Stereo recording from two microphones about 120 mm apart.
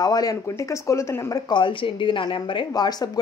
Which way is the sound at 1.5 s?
45° left (ahead or behind).